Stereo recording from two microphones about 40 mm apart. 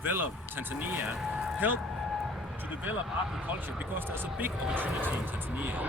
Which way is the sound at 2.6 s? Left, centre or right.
Right.